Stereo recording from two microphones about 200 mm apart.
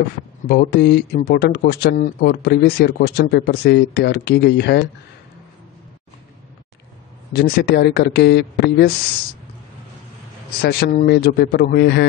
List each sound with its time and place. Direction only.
0.5 s speech: 50° left (ahead or behind)
7.3 s speech: 50° left (ahead or behind)
10.6 s speech: 50° left (ahead or behind)
11.1 s a man's voice: 55° left (ahead or behind)